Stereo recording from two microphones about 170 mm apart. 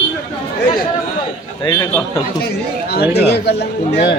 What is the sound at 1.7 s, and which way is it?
Speech, 20° left (ahead or behind).